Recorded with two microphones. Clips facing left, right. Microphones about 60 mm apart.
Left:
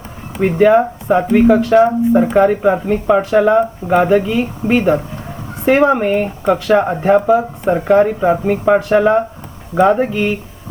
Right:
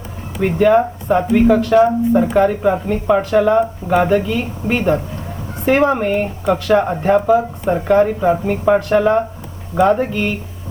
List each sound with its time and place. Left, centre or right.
0.4 s speech: centre